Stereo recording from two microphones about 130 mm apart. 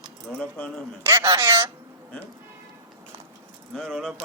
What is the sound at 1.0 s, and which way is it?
Speech, 30° right (ahead or behind).